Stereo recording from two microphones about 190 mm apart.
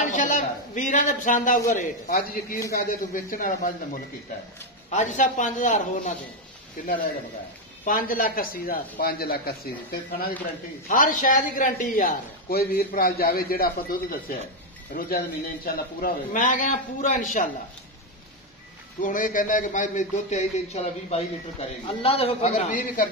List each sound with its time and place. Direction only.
0.1 s a sound: 40° left (ahead or behind)
1.7 s a man's voice: 45° left (ahead or behind)
4.9 s a man's voice: 40° left (ahead or behind)
7.8 s a man's voice: 45° left (ahead or behind)
18.9 s a man's voice: 45° left (ahead or behind)